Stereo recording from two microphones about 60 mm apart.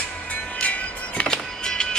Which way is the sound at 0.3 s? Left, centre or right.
Left.